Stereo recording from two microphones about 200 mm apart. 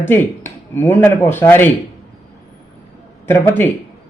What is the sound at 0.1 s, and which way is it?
A man's voice, 10° left (ahead or behind).